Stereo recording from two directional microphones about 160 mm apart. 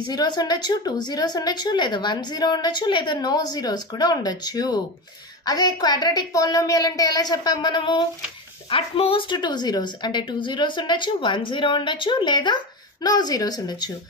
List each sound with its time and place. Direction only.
0.1 s a woman's voice: 25° left (ahead or behind)